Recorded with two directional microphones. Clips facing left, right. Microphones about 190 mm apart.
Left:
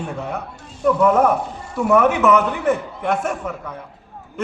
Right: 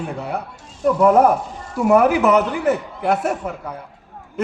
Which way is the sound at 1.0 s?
35° right (ahead or behind).